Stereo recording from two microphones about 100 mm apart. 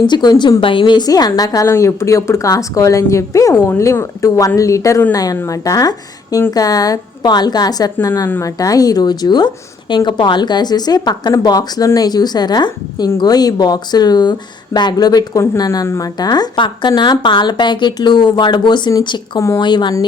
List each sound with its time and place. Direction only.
0.0 s speech: 45° left (ahead or behind)
0.6 s speech: 60° left (ahead or behind); by 1.6 s 40° left (ahead or behind)
1.6 s speech: 25° left (ahead or behind); by 19.9 s 50° left (ahead or behind)